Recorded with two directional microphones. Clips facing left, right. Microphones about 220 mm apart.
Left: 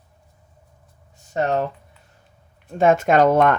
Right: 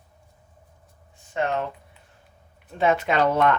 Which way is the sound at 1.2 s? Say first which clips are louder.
Left 4 dB; 40° left (ahead or behind).